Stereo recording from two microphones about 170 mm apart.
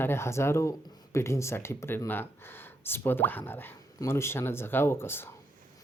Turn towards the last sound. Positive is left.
turn(degrees=15)  # may be behind; listen again after turning